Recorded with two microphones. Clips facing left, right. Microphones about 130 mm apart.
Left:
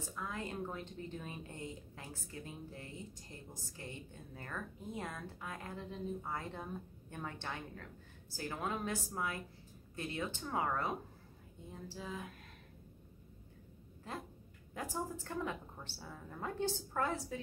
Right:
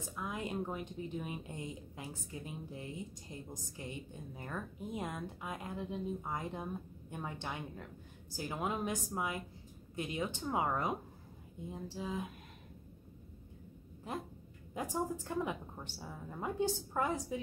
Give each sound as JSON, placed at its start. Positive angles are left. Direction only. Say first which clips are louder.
{"t": 0.1, "sound": "speech", "louder": "right 4 dB", "side_deg": -15}
{"t": 14.7, "sound": "speech", "louder": "right 4 dB", "side_deg": -20}